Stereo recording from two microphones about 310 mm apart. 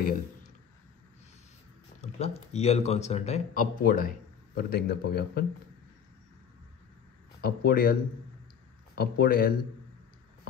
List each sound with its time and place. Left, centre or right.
2.0 s a man's voice: left
7.4 s a man's voice: left